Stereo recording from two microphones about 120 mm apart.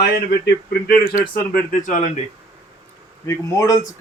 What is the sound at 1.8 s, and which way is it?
Speech, 90° left.